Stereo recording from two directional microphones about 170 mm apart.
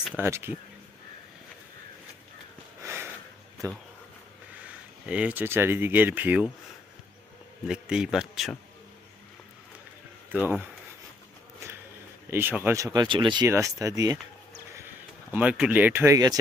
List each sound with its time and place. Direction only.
0.0 s speech: 15° right (ahead or behind)
2.8 s sniff: 15° right (ahead or behind)
4.6 s speech: 5° right (ahead or behind)
7.7 s a man's voice: 5° right (ahead or behind)
12.3 s speech: 10° right (ahead or behind)
15.3 s speech: 10° right (ahead or behind)